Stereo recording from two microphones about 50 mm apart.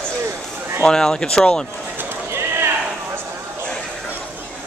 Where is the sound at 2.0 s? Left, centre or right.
Right.